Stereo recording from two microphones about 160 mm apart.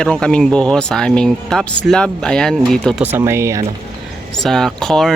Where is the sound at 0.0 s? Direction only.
5° left (ahead or behind).